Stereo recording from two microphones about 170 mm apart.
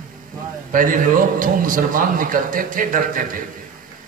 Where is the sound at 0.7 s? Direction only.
55° right (ahead or behind).